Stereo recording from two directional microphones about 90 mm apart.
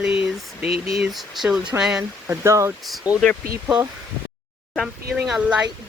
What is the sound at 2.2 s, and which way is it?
Speech, 35° right (ahead or behind).